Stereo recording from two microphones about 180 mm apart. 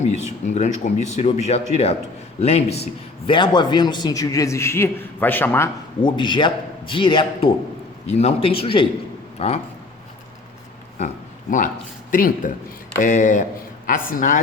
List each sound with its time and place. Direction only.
0.4 s a man's voice: 40° left (ahead or behind); by 5.7 s 10° left (ahead or behind)
6.0 s a man's voice: 25° left (ahead or behind)
12.1 s speech: 50° left (ahead or behind)